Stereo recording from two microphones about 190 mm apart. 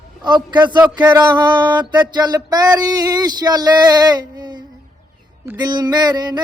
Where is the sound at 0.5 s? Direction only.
25° right (ahead or behind).